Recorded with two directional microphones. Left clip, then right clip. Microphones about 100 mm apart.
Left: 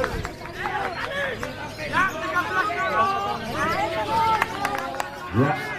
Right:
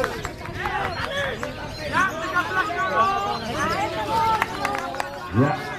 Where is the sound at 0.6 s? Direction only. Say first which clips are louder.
Right 1 dB; 20° right (ahead or behind).